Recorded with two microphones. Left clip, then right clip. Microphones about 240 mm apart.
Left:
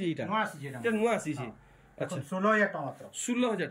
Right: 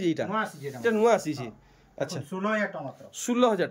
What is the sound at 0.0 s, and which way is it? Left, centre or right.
Speech, centre.